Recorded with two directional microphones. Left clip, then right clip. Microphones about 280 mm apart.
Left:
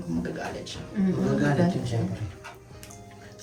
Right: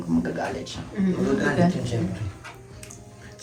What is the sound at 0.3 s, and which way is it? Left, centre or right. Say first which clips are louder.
Speech: right 5 dB; centre.